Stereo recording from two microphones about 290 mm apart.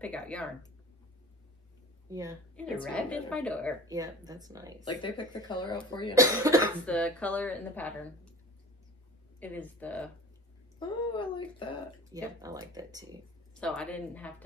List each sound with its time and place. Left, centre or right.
0.0 s a woman's voice: centre
2.0 s a woman's voice: centre
2.5 s a woman's voice: centre
3.9 s speech: centre
4.8 s speech: centre
6.1 s speech: centre
6.9 s a woman's voice: centre
9.4 s a woman's voice: centre
10.8 s speech: centre
12.1 s speech: centre
13.6 s a woman's voice: centre